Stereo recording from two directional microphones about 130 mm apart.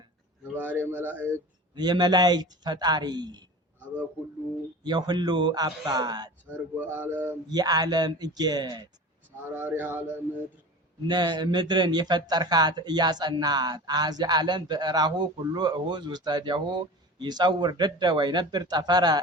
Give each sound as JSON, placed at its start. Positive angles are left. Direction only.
{"t": 0.5, "sound": "a man's voice", "side_deg": -15}
{"t": 1.7, "sound": "speech", "side_deg": -35}
{"t": 4.8, "sound": "speech", "side_deg": -35}
{"t": 6.7, "sound": "a man's voice", "side_deg": -15}
{"t": 7.5, "sound": "speech", "side_deg": -30}
{"t": 9.6, "sound": "a man's voice", "side_deg": -15}
{"t": 11.0, "sound": "speech", "side_deg": -35}